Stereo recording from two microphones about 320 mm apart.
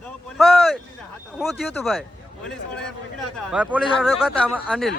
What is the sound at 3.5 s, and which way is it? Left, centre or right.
Speech, centre.